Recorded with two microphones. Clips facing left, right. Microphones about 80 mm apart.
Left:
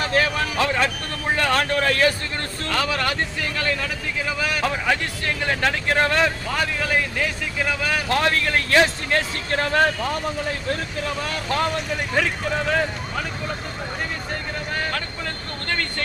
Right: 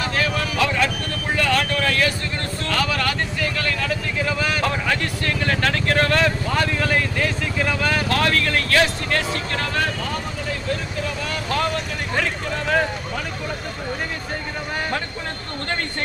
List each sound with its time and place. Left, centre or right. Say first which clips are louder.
0.1 s vehicle: left 2 dB; left
1.4 s speech: even; left
3.7 s speech: right 1 dB; centre
5.2 s speech: right 1 dB; centre
6.5 s speech: right 2 dB; centre
8.1 s speech: left 3 dB; left